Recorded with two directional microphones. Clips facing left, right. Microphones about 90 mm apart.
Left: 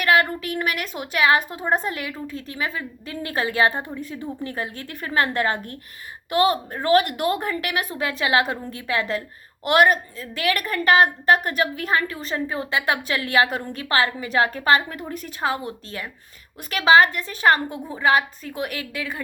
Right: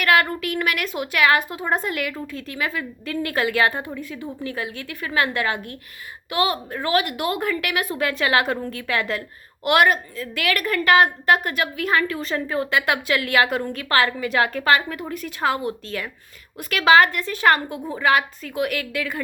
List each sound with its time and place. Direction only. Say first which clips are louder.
0.0 s a woman's voice: even; 25° left (ahead or behind)
7.9 s a woman's voice: right 1 dB; 20° left (ahead or behind)